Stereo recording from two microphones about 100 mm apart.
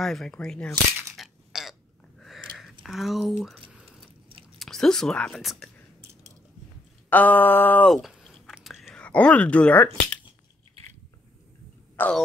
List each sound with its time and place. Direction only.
0.0 s speech: 5° left (ahead or behind)
1.1 s a sound: 5° right (ahead or behind)
2.8 s speech: centre (ahead or behind)
3.7 s a sound: 10° right (ahead or behind)
4.6 s speech: 5° left (ahead or behind)
7.1 s speech: 15° left (ahead or behind)
7.9 s a sound: centre (ahead or behind)
8.6 s whispering: centre (ahead or behind)
9.0 s speech: 15° left (ahead or behind)
12.0 s cough: 20° left (ahead or behind)